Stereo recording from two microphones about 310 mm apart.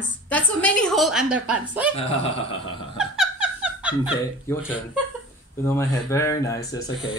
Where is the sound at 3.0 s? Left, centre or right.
Centre.